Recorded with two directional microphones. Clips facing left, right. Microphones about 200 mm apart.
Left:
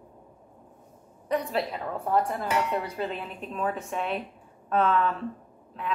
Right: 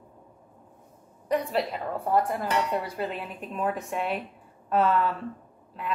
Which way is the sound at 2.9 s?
5° right (ahead or behind).